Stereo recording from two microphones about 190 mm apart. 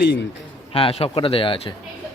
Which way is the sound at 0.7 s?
30° left (ahead or behind).